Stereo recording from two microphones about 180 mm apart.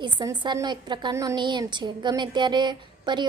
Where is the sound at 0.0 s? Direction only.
25° right (ahead or behind).